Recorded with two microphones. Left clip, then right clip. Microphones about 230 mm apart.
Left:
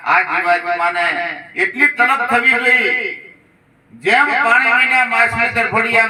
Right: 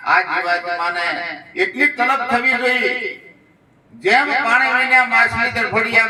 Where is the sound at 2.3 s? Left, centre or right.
Left.